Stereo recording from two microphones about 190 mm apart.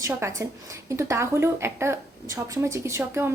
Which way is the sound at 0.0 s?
15° right (ahead or behind).